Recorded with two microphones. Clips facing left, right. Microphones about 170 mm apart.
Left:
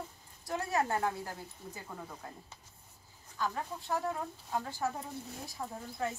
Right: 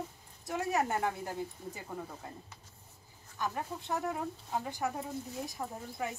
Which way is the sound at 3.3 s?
15° right (ahead or behind).